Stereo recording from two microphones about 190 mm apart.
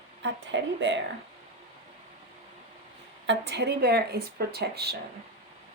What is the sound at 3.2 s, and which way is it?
Speech, 65° right (ahead or behind).